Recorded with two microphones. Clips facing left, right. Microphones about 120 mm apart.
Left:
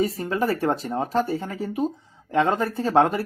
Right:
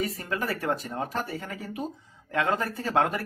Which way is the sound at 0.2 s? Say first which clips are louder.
Left 7 dB; 30° left (ahead or behind).